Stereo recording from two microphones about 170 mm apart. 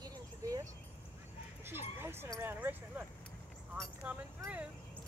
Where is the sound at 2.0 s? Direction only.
15° right (ahead or behind).